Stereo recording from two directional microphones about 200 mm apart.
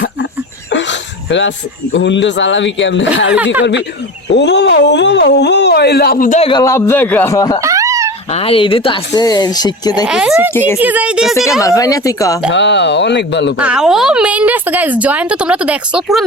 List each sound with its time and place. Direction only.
0.7 s speech: 65° left (ahead or behind)
3.3 s speech: 5° right (ahead or behind)
3.6 s speech: 60° left (ahead or behind); by 6.5 s 40° left (ahead or behind)
6.5 s speech: 15° left (ahead or behind)
7.6 s a sound: 15° right (ahead or behind)
8.3 s speech: 30° left (ahead or behind)
10.1 s a woman's voice: 5° right (ahead or behind)
11.6 s speech: 15° left (ahead or behind)
12.5 s speech: 60° left (ahead or behind)
13.6 s a woman's voice: 5° right (ahead or behind)